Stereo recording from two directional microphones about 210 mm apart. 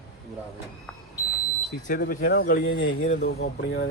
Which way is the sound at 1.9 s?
45° left (ahead or behind).